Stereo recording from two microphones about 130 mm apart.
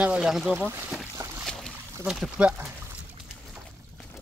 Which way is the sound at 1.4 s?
Centre (ahead or behind).